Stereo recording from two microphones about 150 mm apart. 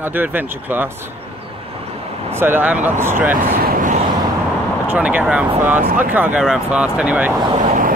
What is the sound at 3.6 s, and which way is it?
Vehicle, 65° right (ahead or behind).